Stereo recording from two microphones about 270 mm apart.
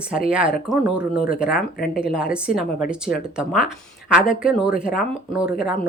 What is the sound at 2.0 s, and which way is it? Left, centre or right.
A woman's voice, centre.